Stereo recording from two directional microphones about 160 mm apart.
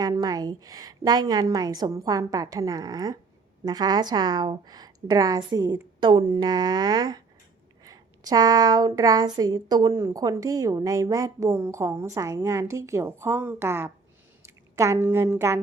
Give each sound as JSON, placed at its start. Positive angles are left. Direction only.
{"t": 0.0, "sound": "a woman's voice", "side_deg": -20}